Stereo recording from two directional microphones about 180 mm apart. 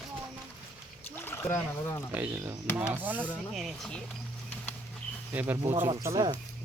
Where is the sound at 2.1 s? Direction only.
15° right (ahead or behind); by 4.0 s 5° left (ahead or behind).